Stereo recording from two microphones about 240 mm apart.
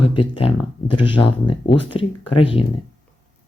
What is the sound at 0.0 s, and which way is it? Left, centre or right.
Speech, left.